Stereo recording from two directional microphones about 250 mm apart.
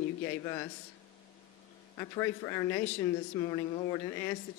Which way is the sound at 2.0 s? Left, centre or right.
Centre.